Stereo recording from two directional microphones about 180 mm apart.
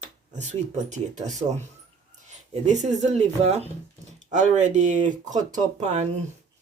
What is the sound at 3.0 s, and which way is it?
Speech, 35° right (ahead or behind).